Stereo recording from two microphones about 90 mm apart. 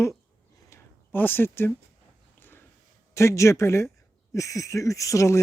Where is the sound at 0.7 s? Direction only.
20° left (ahead or behind).